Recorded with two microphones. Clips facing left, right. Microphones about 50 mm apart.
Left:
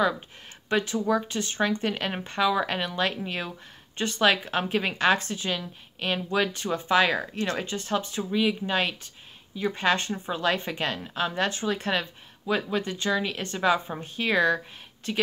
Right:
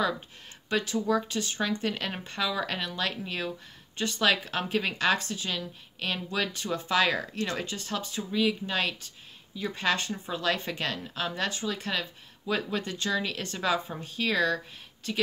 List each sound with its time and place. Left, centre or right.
0.7 s speech: left
1.4 s speech: left
12.4 s speech: centre